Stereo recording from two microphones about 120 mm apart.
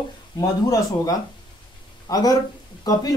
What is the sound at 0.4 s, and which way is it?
Speech, 30° left (ahead or behind).